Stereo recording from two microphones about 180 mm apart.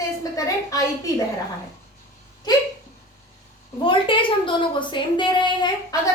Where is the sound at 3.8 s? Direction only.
30° left (ahead or behind).